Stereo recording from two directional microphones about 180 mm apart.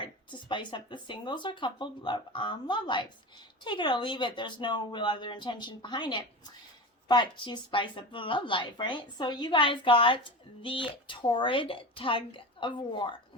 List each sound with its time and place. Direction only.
0.0 s a woman's voice: 25° left (ahead or behind)